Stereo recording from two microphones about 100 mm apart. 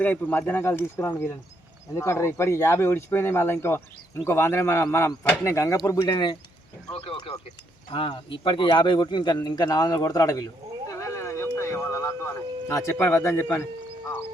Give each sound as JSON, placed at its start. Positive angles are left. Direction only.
{"t": 0.0, "sound": "speech", "side_deg": 20}
{"t": 6.9, "sound": "a man's voice", "side_deg": 70}